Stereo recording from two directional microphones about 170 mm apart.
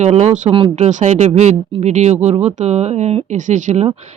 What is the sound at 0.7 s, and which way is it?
Speech, 45° right (ahead or behind).